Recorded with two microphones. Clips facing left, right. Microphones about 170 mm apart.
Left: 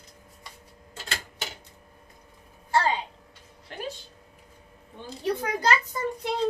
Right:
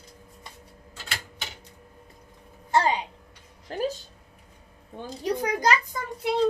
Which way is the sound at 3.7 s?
35° right (ahead or behind).